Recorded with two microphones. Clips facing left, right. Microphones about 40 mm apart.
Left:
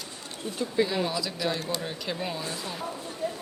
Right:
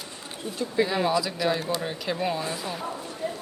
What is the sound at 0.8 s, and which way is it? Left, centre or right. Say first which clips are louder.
Speech: right 4 dB; centre.